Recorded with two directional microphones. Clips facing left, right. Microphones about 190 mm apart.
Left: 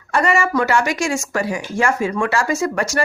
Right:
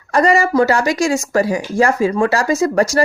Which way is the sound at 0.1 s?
35° right (ahead or behind).